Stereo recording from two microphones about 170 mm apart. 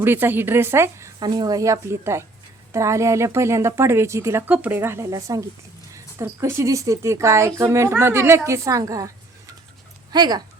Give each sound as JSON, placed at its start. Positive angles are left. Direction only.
{"t": 0.0, "sound": "a woman's voice", "side_deg": -10}